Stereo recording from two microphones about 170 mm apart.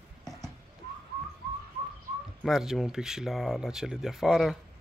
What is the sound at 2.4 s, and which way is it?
Speech, centre (ahead or behind).